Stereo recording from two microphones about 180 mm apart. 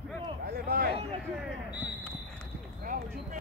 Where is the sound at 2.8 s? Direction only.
50° right (ahead or behind).